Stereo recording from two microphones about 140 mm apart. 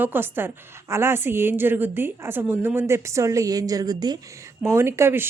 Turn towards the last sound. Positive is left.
turn(degrees=-15)  # may be behind; listen again after turning